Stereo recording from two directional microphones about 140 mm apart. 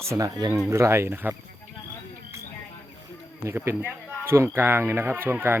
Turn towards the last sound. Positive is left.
turn(degrees=-15)  # may be behind; listen again after turning